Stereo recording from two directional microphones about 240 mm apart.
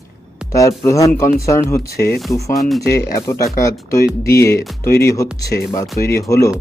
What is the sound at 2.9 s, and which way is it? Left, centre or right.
Speech, centre.